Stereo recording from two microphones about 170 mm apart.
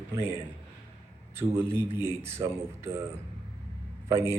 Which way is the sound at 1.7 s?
15° right (ahead or behind).